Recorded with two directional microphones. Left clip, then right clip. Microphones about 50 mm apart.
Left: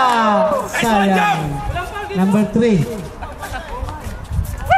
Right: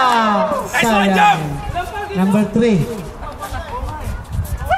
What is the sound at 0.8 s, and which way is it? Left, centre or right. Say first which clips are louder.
Speech: right 3 dB; centre.